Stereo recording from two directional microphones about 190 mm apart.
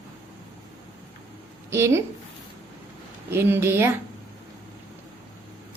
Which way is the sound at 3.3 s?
10° right (ahead or behind).